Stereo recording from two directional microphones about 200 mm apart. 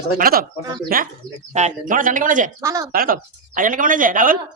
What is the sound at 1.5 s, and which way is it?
A woman's voice, 35° right (ahead or behind).